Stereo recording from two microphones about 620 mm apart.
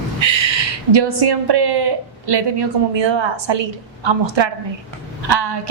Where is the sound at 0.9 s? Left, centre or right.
Right.